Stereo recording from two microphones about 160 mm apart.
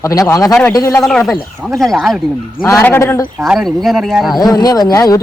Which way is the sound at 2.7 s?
10° left (ahead or behind).